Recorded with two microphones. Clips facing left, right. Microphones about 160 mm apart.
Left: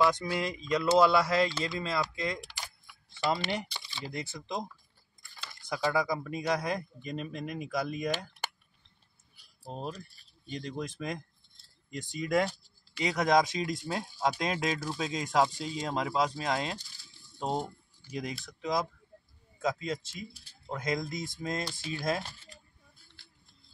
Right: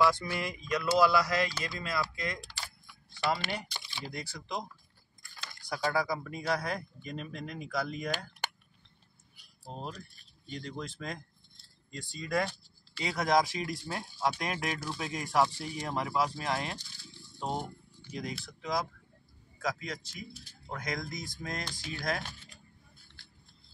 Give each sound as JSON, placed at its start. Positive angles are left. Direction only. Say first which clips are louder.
{"t": 0.0, "sound": "speech", "louder": "left 1 dB", "side_deg": 20}
{"t": 3.7, "sound": "a sound", "louder": "even", "side_deg": -10}
{"t": 4.1, "sound": "speech", "louder": "left 5 dB", "side_deg": 20}
{"t": 5.7, "sound": "a man's voice", "louder": "left 2 dB", "side_deg": 20}
{"t": 10.5, "sound": "speech", "louder": "left 3 dB", "side_deg": 20}